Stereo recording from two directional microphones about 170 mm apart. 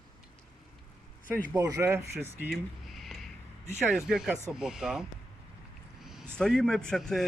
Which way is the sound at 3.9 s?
5° right (ahead or behind).